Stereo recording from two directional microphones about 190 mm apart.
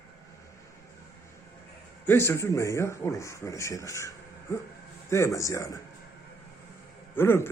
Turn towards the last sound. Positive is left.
turn(degrees=10)  # may be behind; listen again after turning